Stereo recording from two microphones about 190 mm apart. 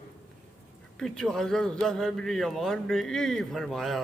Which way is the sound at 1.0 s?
Centre (ahead or behind).